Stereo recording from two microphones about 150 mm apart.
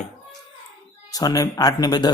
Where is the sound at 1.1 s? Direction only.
25° left (ahead or behind).